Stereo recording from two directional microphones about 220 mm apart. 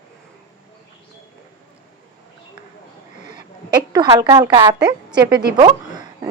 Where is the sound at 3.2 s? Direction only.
35° left (ahead or behind).